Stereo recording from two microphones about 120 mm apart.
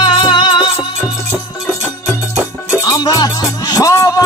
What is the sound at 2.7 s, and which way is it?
Music, 30° left (ahead or behind).